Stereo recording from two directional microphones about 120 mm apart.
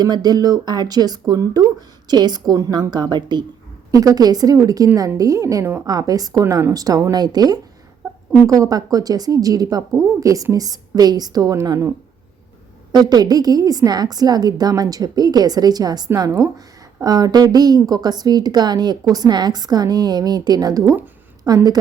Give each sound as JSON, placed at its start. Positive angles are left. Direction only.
{"t": 0.0, "sound": "a woman's voice", "side_deg": -35}
{"t": 8.0, "sound": "a sound", "side_deg": -25}
{"t": 8.4, "sound": "speech", "side_deg": -30}
{"t": 12.9, "sound": "speech", "side_deg": -35}